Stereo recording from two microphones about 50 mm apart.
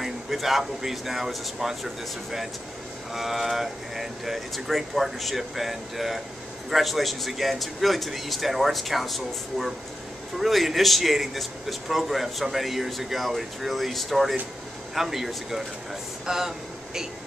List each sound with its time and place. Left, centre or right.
0.0 s speech: centre
3.1 s a man's voice: centre